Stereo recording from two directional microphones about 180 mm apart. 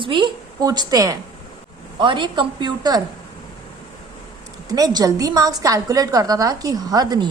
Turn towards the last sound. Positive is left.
turn(degrees=-20)  # may be behind; listen again after turning